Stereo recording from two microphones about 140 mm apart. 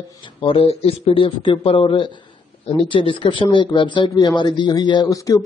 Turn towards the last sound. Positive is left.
turn(degrees=25)  # may be behind; listen again after turning